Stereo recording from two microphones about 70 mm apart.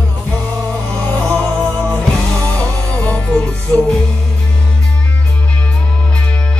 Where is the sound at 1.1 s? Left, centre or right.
Centre.